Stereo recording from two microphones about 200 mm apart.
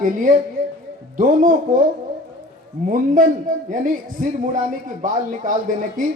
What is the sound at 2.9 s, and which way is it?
A man's voice, 40° right (ahead or behind).